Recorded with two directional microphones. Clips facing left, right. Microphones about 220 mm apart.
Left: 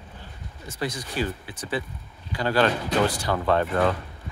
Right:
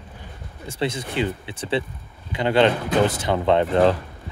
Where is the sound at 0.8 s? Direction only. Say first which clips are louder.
Right 4 dB; 25° right (ahead or behind).